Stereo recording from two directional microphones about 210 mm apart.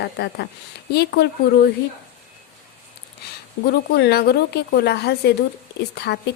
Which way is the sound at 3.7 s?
50° left (ahead or behind).